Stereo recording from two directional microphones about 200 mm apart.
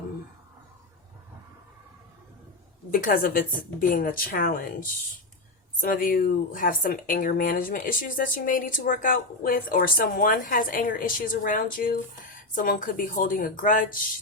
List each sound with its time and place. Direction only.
2.9 s speech: 45° left (ahead or behind)